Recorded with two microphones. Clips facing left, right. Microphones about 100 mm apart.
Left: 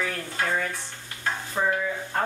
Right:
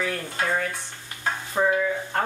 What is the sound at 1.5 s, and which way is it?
Speech, 10° right (ahead or behind).